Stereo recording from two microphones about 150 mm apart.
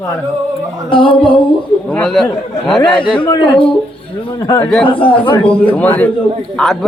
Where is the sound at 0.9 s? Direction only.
35° left (ahead or behind).